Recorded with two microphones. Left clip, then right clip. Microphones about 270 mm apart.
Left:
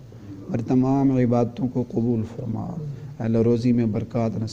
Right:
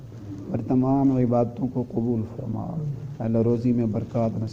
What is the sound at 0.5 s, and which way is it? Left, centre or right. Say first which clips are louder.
Speech: left 1 dB; left.